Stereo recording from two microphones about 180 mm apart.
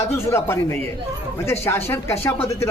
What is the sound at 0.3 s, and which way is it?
Speech, 15° left (ahead or behind).